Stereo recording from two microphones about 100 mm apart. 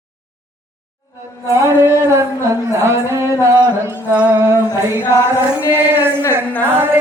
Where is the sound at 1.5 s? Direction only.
30° right (ahead or behind).